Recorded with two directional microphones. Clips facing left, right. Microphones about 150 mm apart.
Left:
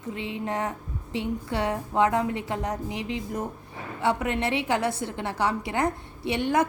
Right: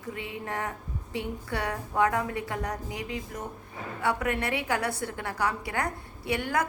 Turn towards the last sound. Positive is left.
turn(degrees=25)  # may be behind; listen again after turning